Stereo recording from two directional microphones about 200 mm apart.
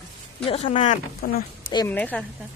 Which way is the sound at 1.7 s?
10° left (ahead or behind).